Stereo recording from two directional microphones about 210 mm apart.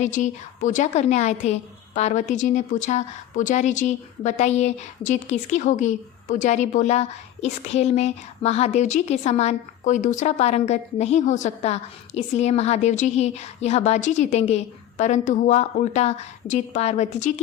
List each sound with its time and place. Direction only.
0.0 s a woman's voice: 35° left (ahead or behind)